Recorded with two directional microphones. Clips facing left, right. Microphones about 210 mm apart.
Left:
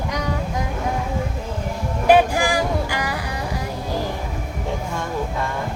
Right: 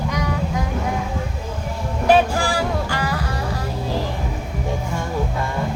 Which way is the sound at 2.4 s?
15° left (ahead or behind).